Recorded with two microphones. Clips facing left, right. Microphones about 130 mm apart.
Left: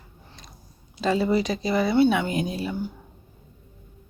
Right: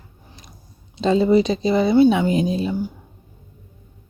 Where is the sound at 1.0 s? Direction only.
25° right (ahead or behind).